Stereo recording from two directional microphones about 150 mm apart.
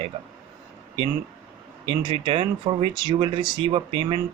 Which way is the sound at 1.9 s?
35° right (ahead or behind).